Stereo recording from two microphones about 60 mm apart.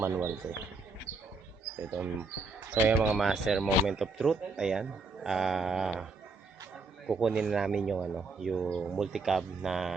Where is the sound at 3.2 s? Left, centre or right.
Centre.